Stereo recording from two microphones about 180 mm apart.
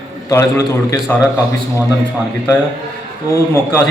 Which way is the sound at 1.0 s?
Centre (ahead or behind).